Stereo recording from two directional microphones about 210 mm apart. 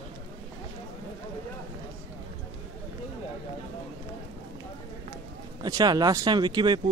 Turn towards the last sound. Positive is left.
turn(degrees=-20)  # may be behind; listen again after turning